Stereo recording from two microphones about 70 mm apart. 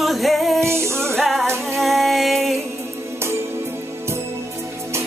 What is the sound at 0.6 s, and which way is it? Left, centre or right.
Music, right.